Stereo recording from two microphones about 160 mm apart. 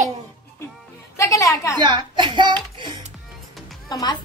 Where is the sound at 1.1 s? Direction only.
20° left (ahead or behind).